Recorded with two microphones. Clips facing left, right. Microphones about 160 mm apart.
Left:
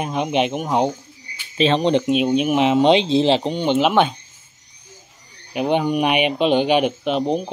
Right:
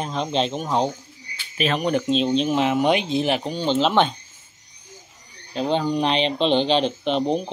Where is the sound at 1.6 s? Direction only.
25° left (ahead or behind).